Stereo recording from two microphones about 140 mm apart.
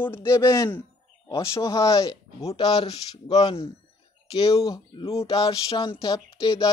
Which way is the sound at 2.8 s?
50° left (ahead or behind).